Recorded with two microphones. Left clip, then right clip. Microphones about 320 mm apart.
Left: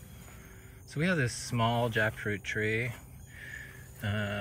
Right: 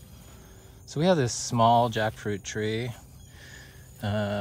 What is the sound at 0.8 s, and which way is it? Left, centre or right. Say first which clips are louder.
Speech: right 7 dB; centre.